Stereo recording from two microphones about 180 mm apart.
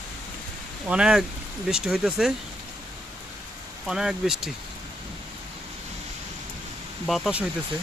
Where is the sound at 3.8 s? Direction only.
5° right (ahead or behind).